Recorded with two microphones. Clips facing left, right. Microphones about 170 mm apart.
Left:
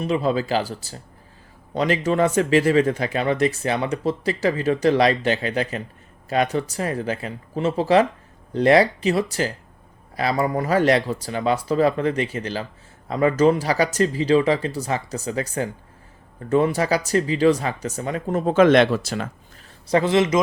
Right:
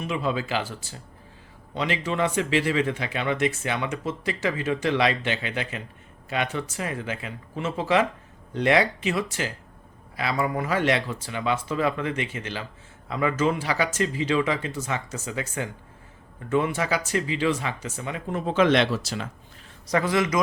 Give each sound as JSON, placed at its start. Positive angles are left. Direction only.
{"t": 0.0, "sound": "speech", "side_deg": 35}
{"t": 19.9, "sound": "a man's voice", "side_deg": 25}